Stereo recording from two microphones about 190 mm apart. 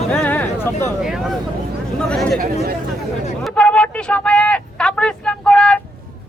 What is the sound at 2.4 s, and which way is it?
Speech, 50° right (ahead or behind).